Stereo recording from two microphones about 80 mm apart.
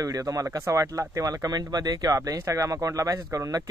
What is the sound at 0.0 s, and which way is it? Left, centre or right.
Speech, right.